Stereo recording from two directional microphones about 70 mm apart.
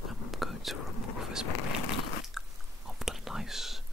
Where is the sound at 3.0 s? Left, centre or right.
Centre.